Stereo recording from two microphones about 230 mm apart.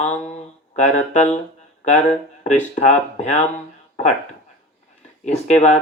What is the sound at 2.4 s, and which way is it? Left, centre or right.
Speech, left.